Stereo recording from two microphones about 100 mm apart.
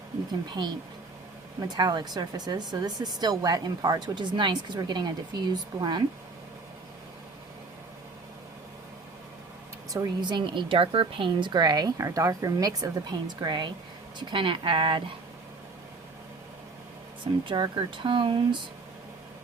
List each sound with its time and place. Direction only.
0.3 s a woman's voice: 45° right (ahead or behind)
9.9 s a woman's voice: 40° right (ahead or behind); by 15.0 s 60° right (ahead or behind)
17.4 s speech: 55° right (ahead or behind)